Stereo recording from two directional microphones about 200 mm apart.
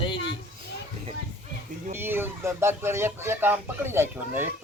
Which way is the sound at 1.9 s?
10° right (ahead or behind).